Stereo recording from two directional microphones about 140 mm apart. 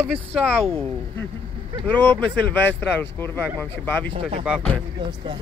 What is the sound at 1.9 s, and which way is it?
Speech, 15° left (ahead or behind).